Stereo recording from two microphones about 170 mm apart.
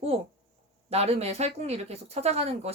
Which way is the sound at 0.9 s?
40° right (ahead or behind).